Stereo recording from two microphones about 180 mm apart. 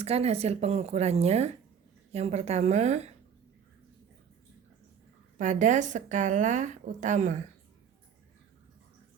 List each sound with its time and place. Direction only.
0.0 s a woman's voice: 35° right (ahead or behind)
5.4 s a woman's voice: 40° right (ahead or behind)